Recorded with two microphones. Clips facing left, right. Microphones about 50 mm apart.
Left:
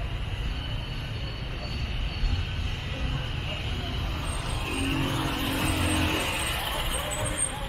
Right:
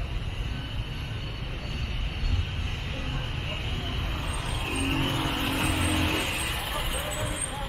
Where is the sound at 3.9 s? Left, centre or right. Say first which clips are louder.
Even; right.